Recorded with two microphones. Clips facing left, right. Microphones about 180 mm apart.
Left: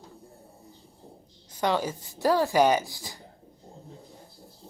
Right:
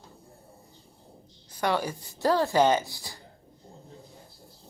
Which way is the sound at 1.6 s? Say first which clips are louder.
Left 1 dB; 15° left (ahead or behind).